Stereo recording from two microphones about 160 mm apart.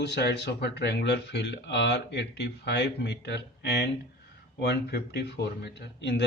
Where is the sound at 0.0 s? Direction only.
90° left.